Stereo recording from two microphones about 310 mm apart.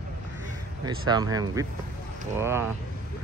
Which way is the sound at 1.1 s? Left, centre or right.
Centre.